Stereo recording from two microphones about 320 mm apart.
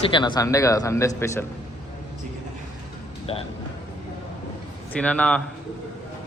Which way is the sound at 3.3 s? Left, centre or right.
Centre.